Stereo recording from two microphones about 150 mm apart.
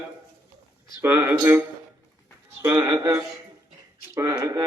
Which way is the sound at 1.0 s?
15° right (ahead or behind).